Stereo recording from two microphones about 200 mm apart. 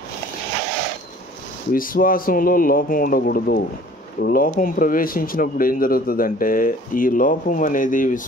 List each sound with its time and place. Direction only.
1.7 s speech: 45° left (ahead or behind)